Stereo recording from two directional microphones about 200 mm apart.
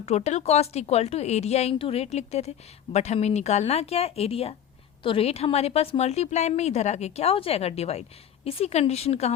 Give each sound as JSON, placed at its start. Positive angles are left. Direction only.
{"t": 0.0, "sound": "speech", "side_deg": 30}